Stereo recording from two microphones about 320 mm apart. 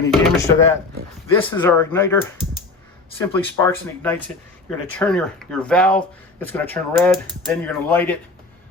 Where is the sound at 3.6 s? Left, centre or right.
Centre.